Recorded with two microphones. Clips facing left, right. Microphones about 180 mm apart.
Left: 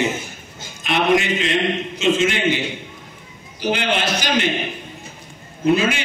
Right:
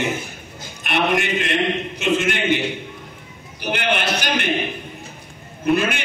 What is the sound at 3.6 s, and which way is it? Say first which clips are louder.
Speech: left 2 dB; 60° right (ahead or behind).